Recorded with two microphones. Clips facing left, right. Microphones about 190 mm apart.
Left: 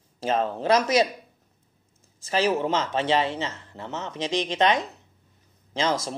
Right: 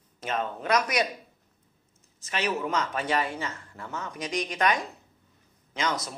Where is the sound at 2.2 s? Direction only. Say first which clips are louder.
Left 6 dB; 30° left (ahead or behind).